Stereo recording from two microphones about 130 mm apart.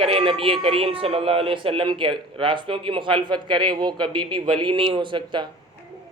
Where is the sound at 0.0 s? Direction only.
45° right (ahead or behind).